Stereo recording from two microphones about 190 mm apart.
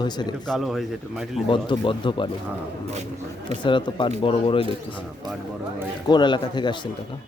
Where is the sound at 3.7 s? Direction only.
25° left (ahead or behind).